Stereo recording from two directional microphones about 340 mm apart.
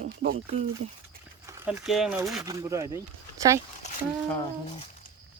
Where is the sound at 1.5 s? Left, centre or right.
Centre.